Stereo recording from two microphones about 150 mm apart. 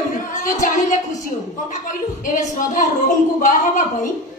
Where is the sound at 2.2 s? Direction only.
60° left (ahead or behind).